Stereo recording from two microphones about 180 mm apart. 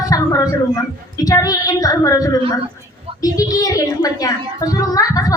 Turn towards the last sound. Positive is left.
turn(degrees=20)  # may be behind; listen again after turning